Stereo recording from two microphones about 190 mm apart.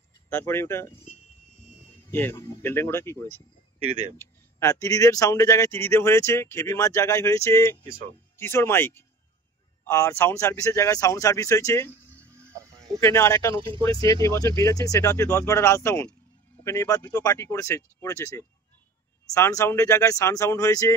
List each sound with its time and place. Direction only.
0.3 s speech: 10° left (ahead or behind)
2.0 s speech: 10° left (ahead or behind)
3.8 s speech: 35° right (ahead or behind)
4.2 s speech: 15° left (ahead or behind)
13.0 s speech: 15° left (ahead or behind)